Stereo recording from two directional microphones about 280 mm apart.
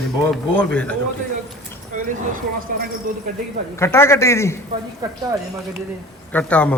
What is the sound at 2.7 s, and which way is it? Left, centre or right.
Speech, right.